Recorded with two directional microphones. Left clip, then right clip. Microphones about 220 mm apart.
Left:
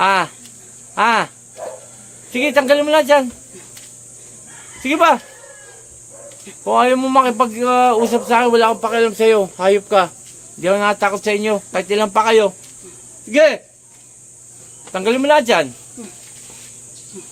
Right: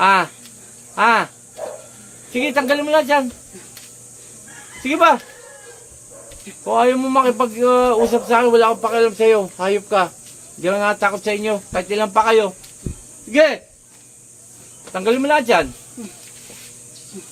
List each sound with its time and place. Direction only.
0.0 s snake: 35° left (ahead or behind)
0.9 s cricket: 35° left (ahead or behind)
2.3 s speech: 35° left (ahead or behind)
4.8 s speech: 35° left (ahead or behind)
6.7 s speech: 30° left (ahead or behind)
14.9 s speech: 35° left (ahead or behind)